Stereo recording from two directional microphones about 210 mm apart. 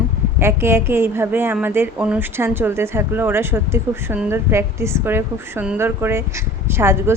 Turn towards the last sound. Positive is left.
turn(degrees=-10)  # may be behind; listen again after turning